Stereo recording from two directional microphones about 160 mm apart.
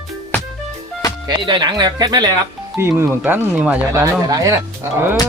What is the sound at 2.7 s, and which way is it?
Speech, 15° right (ahead or behind).